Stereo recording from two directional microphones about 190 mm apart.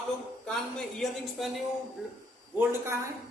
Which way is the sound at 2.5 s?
15° right (ahead or behind).